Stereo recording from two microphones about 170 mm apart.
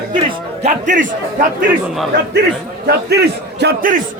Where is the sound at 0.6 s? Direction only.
50° right (ahead or behind).